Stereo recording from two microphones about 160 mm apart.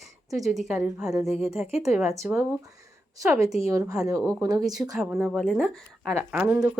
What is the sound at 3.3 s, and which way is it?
A woman's voice, 20° right (ahead or behind).